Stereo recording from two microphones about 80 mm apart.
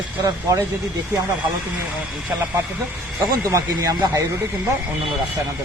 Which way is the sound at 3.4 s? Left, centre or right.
Right.